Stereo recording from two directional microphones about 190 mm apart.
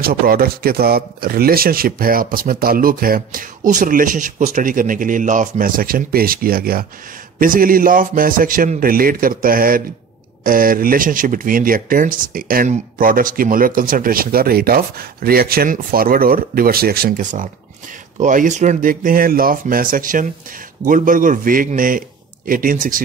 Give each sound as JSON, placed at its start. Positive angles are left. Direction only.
{"t": 0.0, "sound": "speech", "side_deg": -50}